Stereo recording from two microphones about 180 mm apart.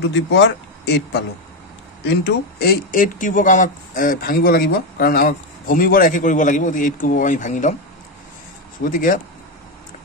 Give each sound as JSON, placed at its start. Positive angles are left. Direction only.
{"t": 0.1, "sound": "speech", "side_deg": 80}
{"t": 8.8, "sound": "speech", "side_deg": 50}